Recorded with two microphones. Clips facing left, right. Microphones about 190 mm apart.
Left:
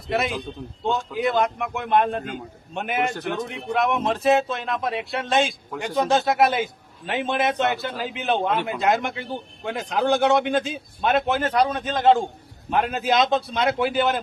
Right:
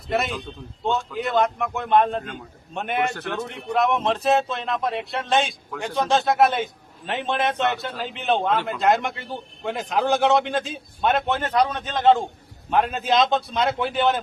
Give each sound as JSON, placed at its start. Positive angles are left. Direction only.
{"t": 0.1, "sound": "a man's voice", "side_deg": 0}